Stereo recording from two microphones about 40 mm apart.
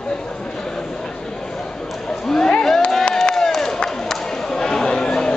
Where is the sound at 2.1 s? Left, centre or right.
Centre.